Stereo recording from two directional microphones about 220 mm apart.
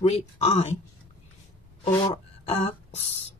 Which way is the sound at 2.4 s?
30° left (ahead or behind).